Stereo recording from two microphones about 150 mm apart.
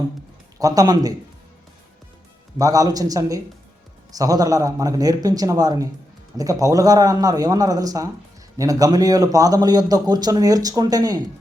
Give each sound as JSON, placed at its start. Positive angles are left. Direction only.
{"t": 0.6, "sound": "speech", "side_deg": -25}
{"t": 2.6, "sound": "speech", "side_deg": -25}